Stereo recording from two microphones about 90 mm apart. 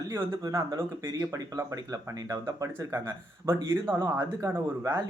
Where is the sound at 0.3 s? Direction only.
40° right (ahead or behind).